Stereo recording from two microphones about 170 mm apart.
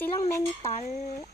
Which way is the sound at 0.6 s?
40° left (ahead or behind).